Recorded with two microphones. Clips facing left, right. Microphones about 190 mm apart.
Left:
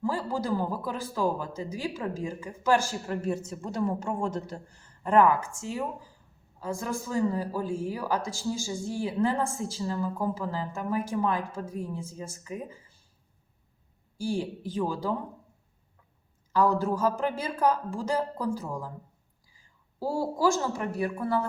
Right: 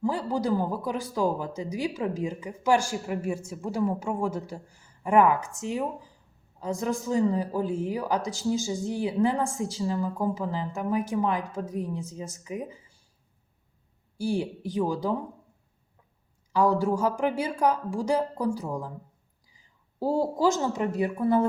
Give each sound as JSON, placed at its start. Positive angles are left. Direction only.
{"t": 0.0, "sound": "speech", "side_deg": -15}
{"t": 14.2, "sound": "speech", "side_deg": -15}
{"t": 16.5, "sound": "a woman's voice", "side_deg": -15}